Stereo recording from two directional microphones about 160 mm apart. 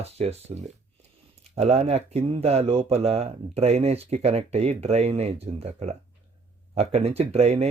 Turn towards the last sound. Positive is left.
turn(degrees=-40)  # may be behind; listen again after turning